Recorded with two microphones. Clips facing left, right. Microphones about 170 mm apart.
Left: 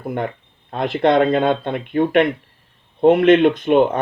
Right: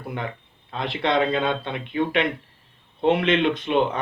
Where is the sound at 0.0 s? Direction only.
45° left (ahead or behind).